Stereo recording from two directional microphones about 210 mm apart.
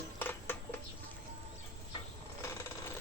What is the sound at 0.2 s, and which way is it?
Music, 10° left (ahead or behind).